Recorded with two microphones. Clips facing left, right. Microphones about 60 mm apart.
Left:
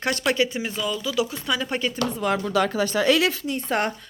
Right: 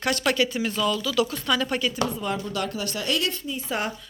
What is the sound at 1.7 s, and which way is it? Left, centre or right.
Speech, left.